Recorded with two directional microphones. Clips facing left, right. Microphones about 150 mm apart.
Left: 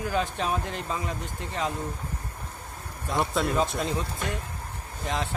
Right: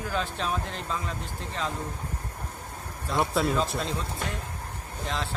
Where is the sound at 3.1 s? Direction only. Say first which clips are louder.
Right 1 dB; centre (ahead or behind).